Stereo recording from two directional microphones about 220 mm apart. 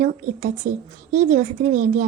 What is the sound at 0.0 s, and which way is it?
Speech, 35° right (ahead or behind).